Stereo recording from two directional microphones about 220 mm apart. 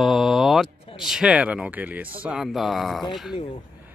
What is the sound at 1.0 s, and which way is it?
Speech, centre (ahead or behind).